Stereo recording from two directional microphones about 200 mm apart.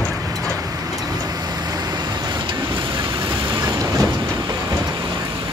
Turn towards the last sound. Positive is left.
turn(degrees=-20)  # may be behind; listen again after turning